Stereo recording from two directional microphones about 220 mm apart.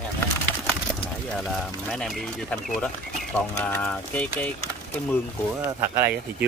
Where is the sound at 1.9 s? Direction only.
Centre (ahead or behind).